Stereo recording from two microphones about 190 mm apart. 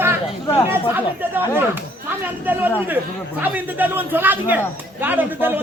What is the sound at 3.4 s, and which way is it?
Speech, 10° right (ahead or behind).